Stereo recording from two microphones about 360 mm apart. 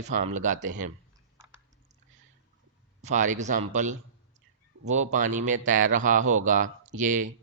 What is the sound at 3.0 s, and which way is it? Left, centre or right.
A man's voice, centre.